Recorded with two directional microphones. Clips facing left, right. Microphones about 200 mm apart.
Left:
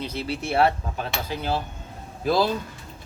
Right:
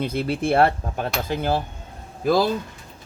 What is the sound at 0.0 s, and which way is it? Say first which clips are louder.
Speech: right 6 dB; 55° right (ahead or behind).